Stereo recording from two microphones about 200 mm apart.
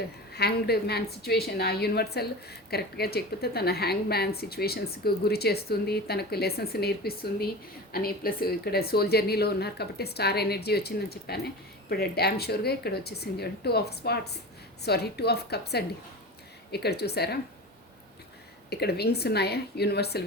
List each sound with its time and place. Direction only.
0.3 s a woman's voice: 55° left (ahead or behind)
18.7 s a woman's voice: 55° left (ahead or behind)